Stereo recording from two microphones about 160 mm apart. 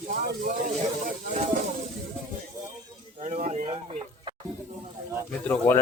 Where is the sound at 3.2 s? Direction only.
50° right (ahead or behind).